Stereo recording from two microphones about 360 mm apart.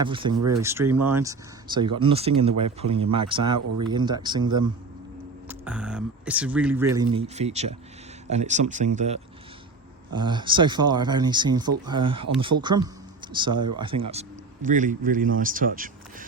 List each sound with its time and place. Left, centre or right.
0.0 s speech: centre